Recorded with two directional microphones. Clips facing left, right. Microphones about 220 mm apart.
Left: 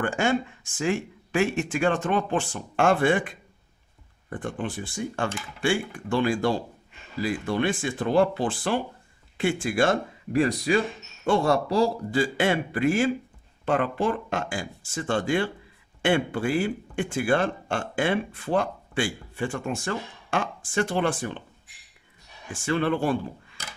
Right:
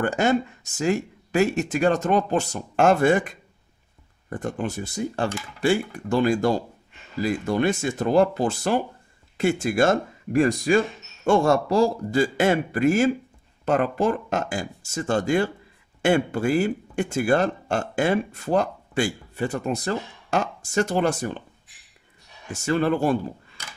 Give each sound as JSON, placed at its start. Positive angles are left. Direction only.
{"t": 0.0, "sound": "a man's voice", "side_deg": -40}
{"t": 22.5, "sound": "speech", "side_deg": -40}